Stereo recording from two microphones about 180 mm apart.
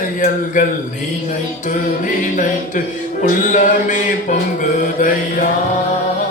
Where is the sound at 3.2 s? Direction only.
45° left (ahead or behind).